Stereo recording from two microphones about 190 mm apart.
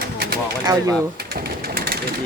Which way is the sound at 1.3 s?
55° right (ahead or behind).